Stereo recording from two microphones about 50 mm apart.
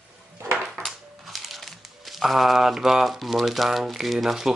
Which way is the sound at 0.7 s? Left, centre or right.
Centre.